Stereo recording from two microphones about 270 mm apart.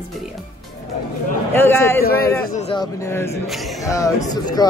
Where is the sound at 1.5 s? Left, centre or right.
Centre.